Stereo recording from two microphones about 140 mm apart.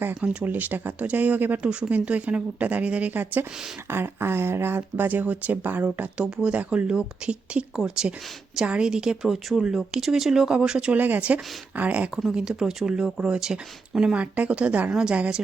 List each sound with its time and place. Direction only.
0.0 s a woman's voice: 10° right (ahead or behind)